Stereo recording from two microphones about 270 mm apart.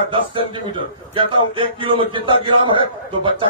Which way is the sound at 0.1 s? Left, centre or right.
Centre.